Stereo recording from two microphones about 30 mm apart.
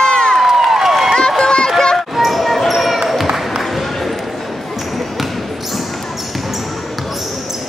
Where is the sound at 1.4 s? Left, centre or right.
Left.